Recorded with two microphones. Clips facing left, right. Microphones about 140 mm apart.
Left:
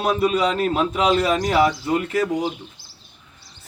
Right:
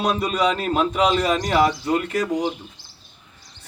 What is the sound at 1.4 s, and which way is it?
Speech, 10° left (ahead or behind).